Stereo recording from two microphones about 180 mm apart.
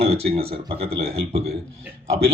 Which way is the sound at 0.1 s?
35° right (ahead or behind).